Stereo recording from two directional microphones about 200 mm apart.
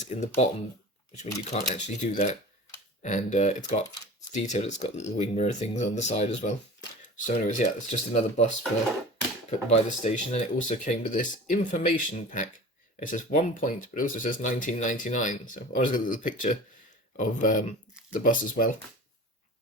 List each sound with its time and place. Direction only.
0.0 s speech: 35° left (ahead or behind)